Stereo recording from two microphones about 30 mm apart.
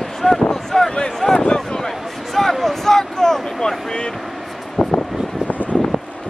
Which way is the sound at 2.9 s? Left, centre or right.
Centre.